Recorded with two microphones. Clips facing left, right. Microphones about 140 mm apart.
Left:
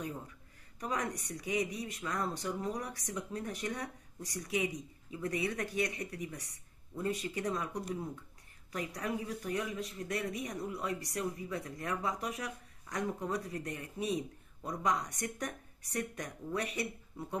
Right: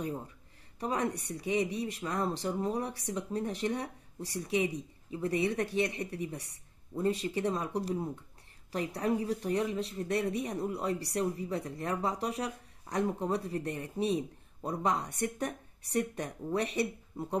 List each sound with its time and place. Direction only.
0.7 s speech: 25° right (ahead or behind)